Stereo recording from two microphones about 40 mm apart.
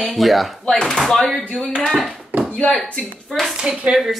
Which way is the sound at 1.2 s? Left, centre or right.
Centre.